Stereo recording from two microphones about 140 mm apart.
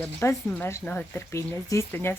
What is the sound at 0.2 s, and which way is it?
A woman's voice, 20° left (ahead or behind).